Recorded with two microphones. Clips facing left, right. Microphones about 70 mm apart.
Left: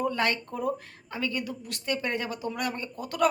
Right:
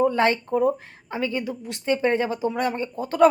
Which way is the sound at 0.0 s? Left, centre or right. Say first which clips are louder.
Right 7 dB; right.